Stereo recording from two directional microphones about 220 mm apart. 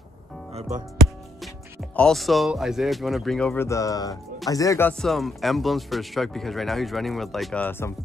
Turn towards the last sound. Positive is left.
turn(degrees=10)  # may be behind; listen again after turning